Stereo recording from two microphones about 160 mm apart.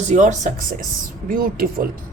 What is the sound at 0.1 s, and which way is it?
Speech, 50° right (ahead or behind).